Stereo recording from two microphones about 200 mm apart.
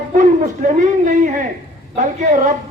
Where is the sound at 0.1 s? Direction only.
40° right (ahead or behind).